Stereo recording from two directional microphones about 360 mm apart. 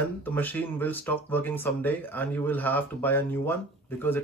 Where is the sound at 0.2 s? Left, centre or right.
Centre.